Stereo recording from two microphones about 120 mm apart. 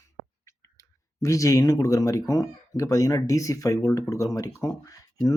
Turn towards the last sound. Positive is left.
turn(degrees=30)  # may be behind; listen again after turning